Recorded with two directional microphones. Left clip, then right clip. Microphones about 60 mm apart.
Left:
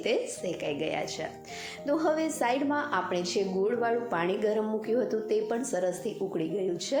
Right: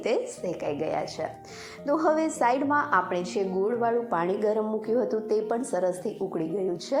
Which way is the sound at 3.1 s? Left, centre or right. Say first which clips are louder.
Right 1 dB; left.